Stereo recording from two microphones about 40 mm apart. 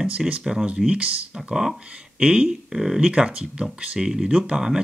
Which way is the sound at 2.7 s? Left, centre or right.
Centre.